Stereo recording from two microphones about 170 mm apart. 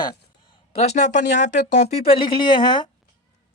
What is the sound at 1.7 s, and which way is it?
Speech, 30° left (ahead or behind).